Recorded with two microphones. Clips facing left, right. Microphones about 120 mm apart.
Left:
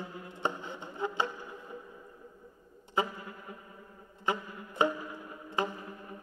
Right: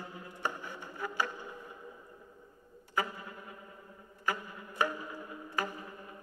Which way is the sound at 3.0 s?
20° left (ahead or behind).